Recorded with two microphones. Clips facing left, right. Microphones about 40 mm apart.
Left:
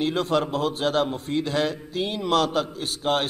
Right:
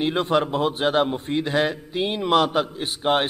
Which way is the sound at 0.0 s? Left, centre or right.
Right.